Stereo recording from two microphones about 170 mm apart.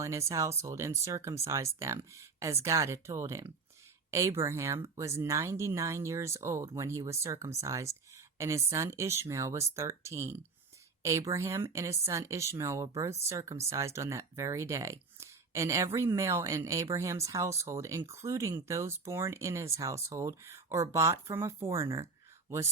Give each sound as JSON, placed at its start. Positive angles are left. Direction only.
{"t": 0.0, "sound": "speech", "side_deg": -15}